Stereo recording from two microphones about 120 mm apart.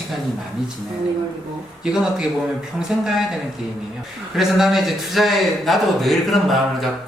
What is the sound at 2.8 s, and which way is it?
Speech, 5° right (ahead or behind).